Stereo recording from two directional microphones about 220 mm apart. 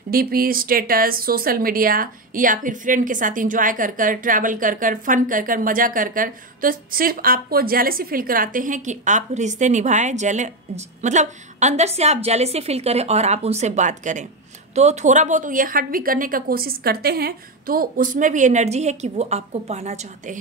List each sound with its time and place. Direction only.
0.1 s a woman's voice: 40° right (ahead or behind)